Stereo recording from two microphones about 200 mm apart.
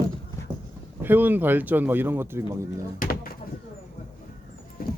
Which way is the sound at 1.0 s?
10° right (ahead or behind).